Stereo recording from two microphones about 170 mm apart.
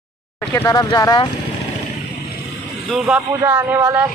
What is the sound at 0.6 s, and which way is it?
Speech, 20° left (ahead or behind).